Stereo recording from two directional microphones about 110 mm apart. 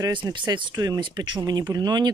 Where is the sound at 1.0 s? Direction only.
45° right (ahead or behind).